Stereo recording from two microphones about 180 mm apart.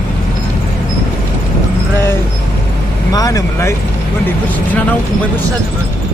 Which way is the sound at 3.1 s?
20° left (ahead or behind).